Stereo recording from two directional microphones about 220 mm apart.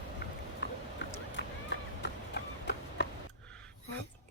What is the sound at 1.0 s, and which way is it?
Vehicle, 55° left (ahead or behind).